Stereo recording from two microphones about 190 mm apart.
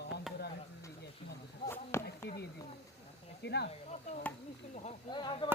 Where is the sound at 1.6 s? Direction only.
15° left (ahead or behind).